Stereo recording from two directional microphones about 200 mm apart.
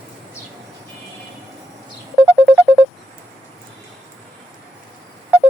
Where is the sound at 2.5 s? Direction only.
Centre (ahead or behind).